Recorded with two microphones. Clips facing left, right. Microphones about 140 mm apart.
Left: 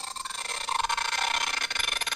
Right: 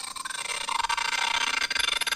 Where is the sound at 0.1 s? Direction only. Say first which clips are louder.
Right 3 dB; centre (ahead or behind).